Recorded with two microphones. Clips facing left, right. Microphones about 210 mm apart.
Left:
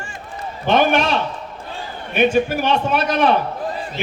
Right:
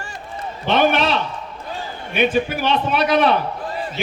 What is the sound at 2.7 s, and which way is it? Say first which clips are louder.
Speech: even; 50° left (ahead or behind).